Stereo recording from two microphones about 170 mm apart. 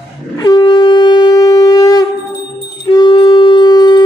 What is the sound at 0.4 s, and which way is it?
Shofar, 25° left (ahead or behind).